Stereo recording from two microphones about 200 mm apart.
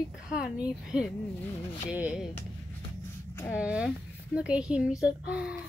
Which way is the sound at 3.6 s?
5° right (ahead or behind).